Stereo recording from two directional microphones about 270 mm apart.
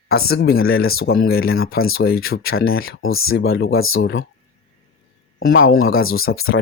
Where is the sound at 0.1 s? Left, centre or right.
Left.